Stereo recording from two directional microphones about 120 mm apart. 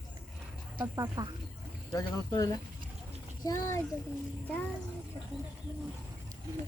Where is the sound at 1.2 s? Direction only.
30° right (ahead or behind).